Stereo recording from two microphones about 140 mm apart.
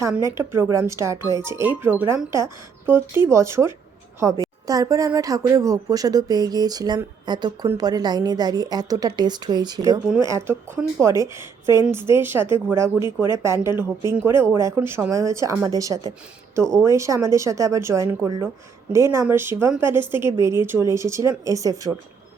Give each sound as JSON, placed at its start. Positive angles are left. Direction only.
{"t": 0.1, "sound": "speech", "side_deg": -20}
{"t": 10.2, "sound": "speech", "side_deg": -20}